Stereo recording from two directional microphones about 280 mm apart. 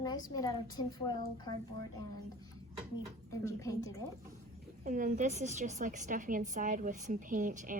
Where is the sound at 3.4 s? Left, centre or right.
Centre.